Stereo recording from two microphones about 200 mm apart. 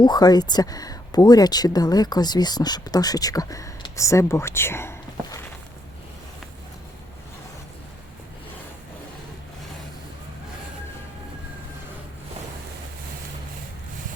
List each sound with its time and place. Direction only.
0.0 s speech: 20° left (ahead or behind)